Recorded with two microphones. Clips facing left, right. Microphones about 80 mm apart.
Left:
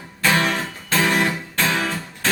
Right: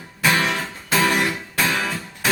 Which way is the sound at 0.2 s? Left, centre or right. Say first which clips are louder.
Left 1 dB; centre.